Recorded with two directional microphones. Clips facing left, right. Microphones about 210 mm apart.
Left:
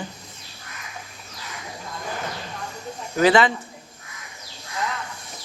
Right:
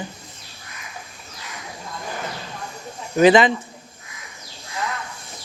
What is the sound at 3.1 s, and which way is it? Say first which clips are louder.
Speech: right 4 dB; 20° right (ahead or behind).